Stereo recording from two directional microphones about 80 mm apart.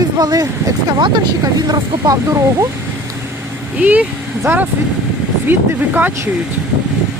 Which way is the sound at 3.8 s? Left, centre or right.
Right.